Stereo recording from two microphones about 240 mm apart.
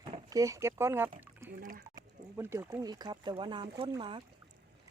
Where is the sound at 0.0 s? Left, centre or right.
Centre.